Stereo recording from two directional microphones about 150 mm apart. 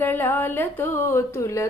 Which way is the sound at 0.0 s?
15° left (ahead or behind).